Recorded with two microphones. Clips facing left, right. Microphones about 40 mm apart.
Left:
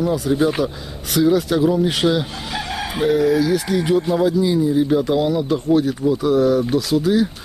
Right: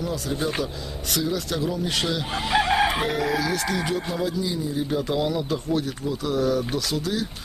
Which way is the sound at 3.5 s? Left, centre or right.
Centre.